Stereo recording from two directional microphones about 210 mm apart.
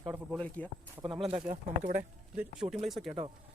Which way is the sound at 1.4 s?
35° right (ahead or behind).